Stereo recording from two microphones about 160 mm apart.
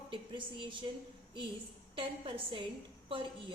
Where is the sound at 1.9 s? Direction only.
35° right (ahead or behind).